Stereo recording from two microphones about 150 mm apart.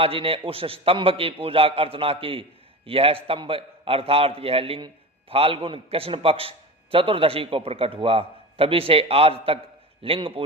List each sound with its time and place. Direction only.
0.0 s a man's voice: 40° right (ahead or behind)